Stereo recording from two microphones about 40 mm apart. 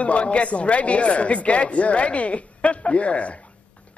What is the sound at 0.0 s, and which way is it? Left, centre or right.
A man's voice, left.